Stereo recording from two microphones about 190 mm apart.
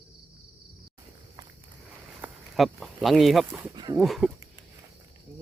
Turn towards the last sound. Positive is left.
turn(degrees=0)  # may be behind; listen again after turning